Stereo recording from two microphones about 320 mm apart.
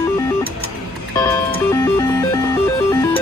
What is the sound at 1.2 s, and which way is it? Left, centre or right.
Music, centre.